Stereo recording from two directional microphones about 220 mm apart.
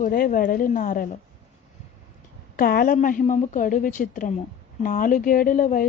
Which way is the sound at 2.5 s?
40° left (ahead or behind).